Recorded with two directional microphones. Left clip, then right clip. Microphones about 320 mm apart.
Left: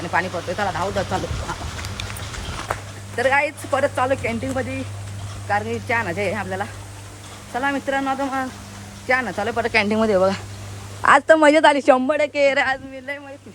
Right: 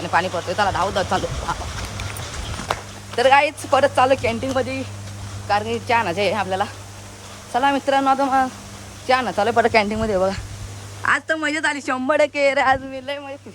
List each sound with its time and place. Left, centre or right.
0.1 s speech: centre
3.2 s speech: centre
9.6 s speech: right
9.8 s speech: centre